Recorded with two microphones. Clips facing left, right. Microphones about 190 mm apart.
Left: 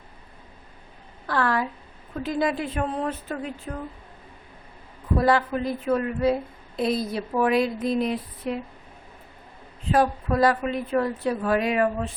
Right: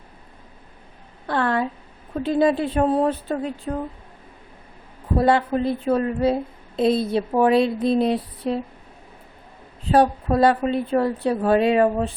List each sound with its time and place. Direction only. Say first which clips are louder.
1.3 s a woman's voice: right 3 dB; 25° right (ahead or behind)
5.1 s a woman's voice: right 3 dB; 25° right (ahead or behind)
9.9 s a woman's voice: right 4 dB; 30° right (ahead or behind)